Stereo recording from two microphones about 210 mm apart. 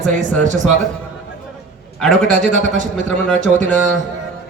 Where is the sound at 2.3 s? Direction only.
35° right (ahead or behind).